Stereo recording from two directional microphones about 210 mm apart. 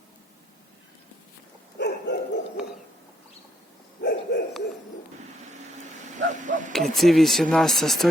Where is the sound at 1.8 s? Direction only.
55° left (ahead or behind).